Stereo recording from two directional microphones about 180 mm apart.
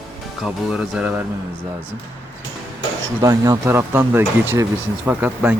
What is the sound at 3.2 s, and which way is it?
Speech, 20° right (ahead or behind).